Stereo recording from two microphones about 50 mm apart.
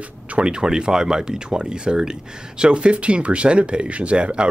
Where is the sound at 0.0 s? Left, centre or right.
Right.